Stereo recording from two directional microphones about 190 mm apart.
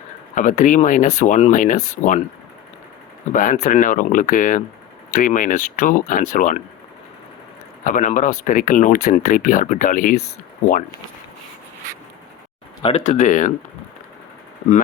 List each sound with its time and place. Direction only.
0.3 s speech: 45° left (ahead or behind)
3.3 s speech: 40° left (ahead or behind)
7.9 s speech: 40° left (ahead or behind)
12.8 s speech: 40° left (ahead or behind)